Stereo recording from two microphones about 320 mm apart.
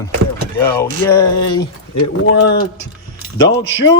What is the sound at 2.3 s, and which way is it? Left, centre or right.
Speech, left.